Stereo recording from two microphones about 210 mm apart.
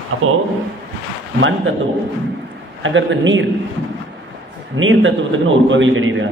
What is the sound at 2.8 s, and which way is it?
Speech, 65° right (ahead or behind).